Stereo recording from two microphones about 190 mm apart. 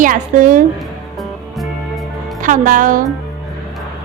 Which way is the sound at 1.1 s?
Centre (ahead or behind).